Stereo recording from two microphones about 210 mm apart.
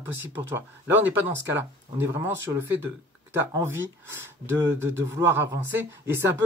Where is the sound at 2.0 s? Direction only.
10° right (ahead or behind).